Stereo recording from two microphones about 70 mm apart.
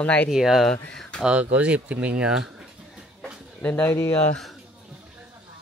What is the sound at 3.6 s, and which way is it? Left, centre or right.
Speech, left.